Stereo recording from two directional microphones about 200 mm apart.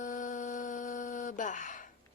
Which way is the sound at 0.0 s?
40° left (ahead or behind).